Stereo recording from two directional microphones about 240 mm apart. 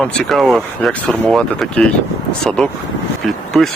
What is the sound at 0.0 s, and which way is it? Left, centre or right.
Speech, centre.